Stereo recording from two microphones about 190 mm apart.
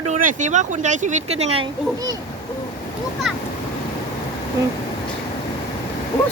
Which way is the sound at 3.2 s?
Centre (ahead or behind).